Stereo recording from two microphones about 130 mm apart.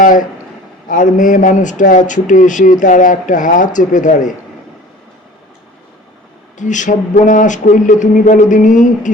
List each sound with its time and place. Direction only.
0.0 s a man's voice: 90° left
0.9 s speech: 75° left (ahead or behind)
2.8 s speech: 85° left
6.6 s speech: 70° left (ahead or behind)